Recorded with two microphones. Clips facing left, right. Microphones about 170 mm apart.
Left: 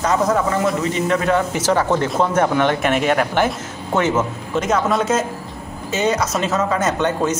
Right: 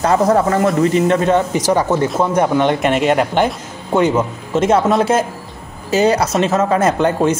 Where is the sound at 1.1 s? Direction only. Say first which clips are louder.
Right 4 dB; 20° right (ahead or behind).